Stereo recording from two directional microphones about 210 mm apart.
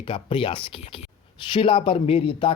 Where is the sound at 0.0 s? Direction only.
25° left (ahead or behind).